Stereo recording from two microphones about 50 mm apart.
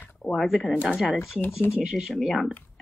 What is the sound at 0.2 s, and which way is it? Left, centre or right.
Speech, centre.